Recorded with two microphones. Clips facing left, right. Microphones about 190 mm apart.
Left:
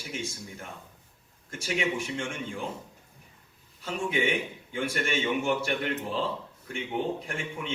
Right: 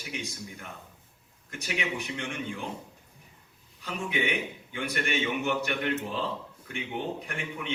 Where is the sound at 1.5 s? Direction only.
30° left (ahead or behind).